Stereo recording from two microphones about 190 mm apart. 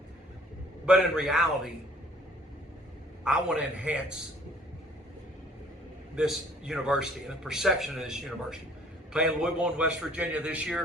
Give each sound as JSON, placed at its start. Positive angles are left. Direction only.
{"t": 0.9, "sound": "a man's voice", "side_deg": -5}
{"t": 3.2, "sound": "a man's voice", "side_deg": -5}
{"t": 6.1, "sound": "a man's voice", "side_deg": -5}